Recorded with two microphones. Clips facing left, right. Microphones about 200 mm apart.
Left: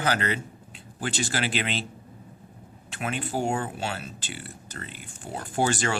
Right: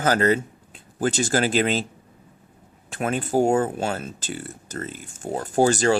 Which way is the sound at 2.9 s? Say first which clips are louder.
Right 7 dB; 45° right (ahead or behind).